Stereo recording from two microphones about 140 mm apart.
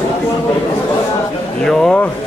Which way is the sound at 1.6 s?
5° left (ahead or behind).